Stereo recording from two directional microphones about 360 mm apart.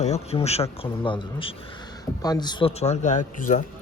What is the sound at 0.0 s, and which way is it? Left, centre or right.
Speech, centre.